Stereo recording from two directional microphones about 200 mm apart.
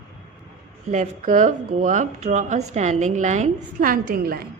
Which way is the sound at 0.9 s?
35° right (ahead or behind).